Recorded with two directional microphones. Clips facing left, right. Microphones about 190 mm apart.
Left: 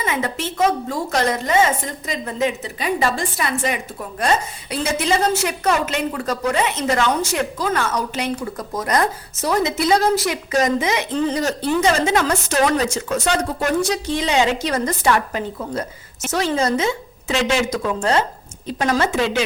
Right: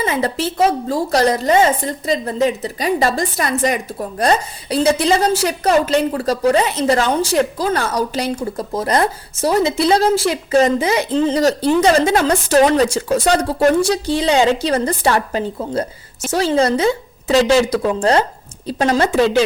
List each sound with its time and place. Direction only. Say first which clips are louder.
0.0 s a woman's voice: right 4 dB; 35° right (ahead or behind)